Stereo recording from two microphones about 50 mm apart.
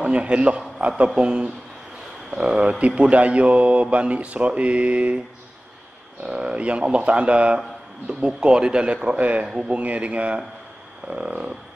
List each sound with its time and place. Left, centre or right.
0.0 s speech: right
6.2 s speech: right